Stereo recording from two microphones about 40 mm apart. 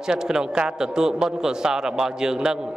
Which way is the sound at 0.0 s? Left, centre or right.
Centre.